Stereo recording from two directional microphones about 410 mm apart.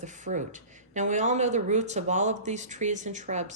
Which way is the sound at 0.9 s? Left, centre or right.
Centre.